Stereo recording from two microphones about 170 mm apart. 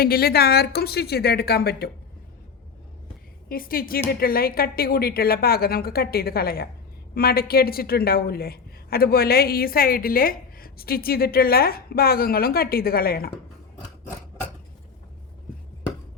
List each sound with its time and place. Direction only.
0.0 s a woman's voice: 65° left (ahead or behind)
3.5 s a woman's voice: 60° left (ahead or behind)